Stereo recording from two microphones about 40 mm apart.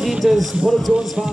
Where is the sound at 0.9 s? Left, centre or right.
Centre.